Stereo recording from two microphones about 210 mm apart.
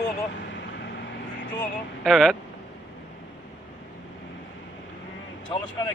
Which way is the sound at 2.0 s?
Centre (ahead or behind).